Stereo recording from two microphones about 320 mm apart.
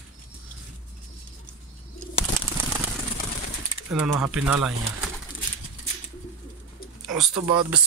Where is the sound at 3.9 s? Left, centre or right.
Centre.